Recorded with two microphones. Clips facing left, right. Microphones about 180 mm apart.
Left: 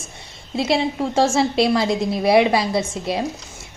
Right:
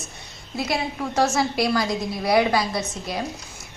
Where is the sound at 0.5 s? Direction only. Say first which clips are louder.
Left 6 dB; 25° left (ahead or behind).